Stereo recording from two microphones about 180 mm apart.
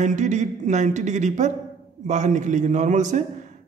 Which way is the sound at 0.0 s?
40° right (ahead or behind).